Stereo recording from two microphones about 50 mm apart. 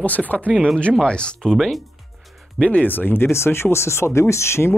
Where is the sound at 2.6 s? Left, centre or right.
Left.